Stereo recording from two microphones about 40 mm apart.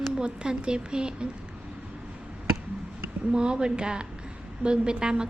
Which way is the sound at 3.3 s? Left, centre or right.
Right.